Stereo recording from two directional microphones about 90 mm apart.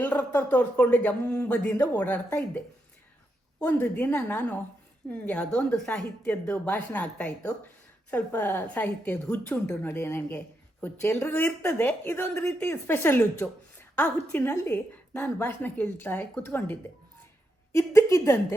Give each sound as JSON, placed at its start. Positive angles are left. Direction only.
{"t": 0.0, "sound": "a woman's voice", "side_deg": 20}
{"t": 3.6, "sound": "a woman's voice", "side_deg": 20}
{"t": 9.8, "sound": "speech", "side_deg": 30}
{"t": 17.7, "sound": "a woman's voice", "side_deg": 30}